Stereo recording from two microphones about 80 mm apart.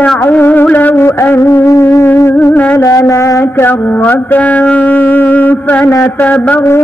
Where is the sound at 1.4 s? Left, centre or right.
Left.